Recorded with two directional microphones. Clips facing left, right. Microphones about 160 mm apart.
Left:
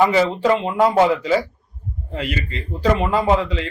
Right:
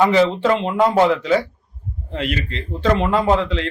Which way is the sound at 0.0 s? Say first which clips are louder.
Right 1 dB; 5° left (ahead or behind).